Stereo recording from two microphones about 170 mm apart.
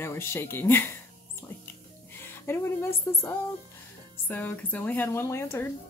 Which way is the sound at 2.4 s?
15° left (ahead or behind).